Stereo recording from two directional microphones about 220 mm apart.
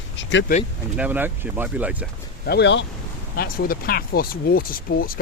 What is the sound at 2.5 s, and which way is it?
Speech, 50° left (ahead or behind).